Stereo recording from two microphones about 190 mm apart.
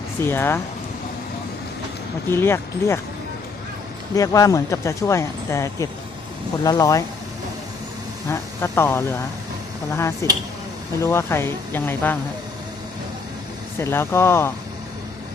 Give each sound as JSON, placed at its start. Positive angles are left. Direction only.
{"t": 0.2, "sound": "speech", "side_deg": 10}
{"t": 2.3, "sound": "speech", "side_deg": 15}
{"t": 4.1, "sound": "speech", "side_deg": 20}
{"t": 8.3, "sound": "speech", "side_deg": 15}
{"t": 10.2, "sound": "speech", "side_deg": 15}
{"t": 13.7, "sound": "speech", "side_deg": 10}